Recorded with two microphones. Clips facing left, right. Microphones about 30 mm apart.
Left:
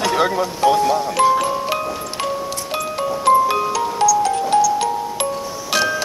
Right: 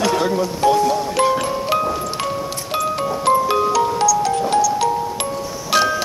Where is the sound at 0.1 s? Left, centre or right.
Left.